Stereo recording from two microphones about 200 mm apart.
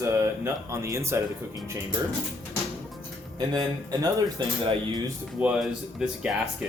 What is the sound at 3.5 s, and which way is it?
Speech, 20° right (ahead or behind).